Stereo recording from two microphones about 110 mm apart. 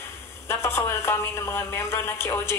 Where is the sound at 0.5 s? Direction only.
25° left (ahead or behind).